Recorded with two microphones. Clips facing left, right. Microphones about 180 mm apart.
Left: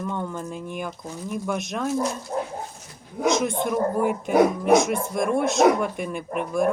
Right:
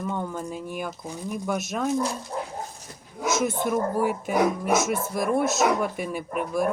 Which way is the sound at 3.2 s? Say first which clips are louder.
Left 2 dB; 5° right (ahead or behind).